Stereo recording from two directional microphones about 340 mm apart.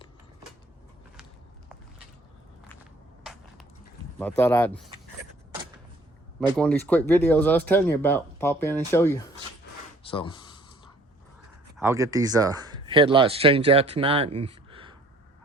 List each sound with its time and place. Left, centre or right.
4.2 s speech: centre
6.6 s speech: centre
11.8 s speech: centre